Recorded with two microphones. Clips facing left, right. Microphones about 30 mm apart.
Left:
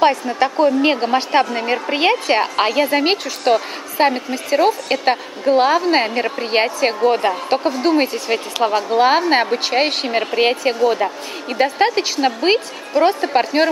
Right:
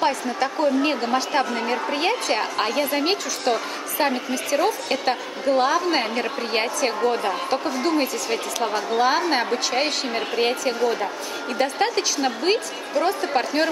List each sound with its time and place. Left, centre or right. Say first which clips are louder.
0.0 s a woman's voice: left 7 dB; left